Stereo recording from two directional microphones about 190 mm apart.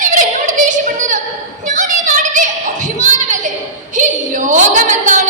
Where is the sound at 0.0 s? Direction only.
40° right (ahead or behind).